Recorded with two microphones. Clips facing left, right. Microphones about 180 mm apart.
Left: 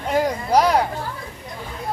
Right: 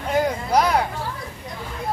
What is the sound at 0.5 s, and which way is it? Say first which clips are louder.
Speech: left 2 dB; 30° left (ahead or behind).